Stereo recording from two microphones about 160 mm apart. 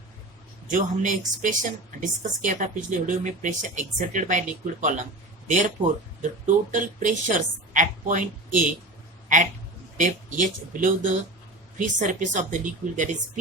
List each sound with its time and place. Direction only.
0.7 s speech: 55° right (ahead or behind)
10.0 s speech: 55° right (ahead or behind)